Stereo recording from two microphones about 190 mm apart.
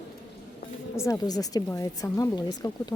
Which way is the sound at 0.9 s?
15° left (ahead or behind).